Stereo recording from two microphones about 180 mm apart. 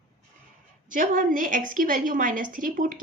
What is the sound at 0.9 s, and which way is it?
A woman's voice, 50° right (ahead or behind).